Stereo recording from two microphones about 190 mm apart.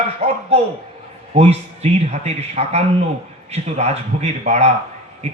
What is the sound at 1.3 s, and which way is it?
A man's voice, 35° right (ahead or behind).